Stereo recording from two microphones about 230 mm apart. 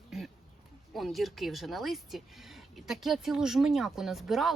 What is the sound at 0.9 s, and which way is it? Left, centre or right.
Speech, centre.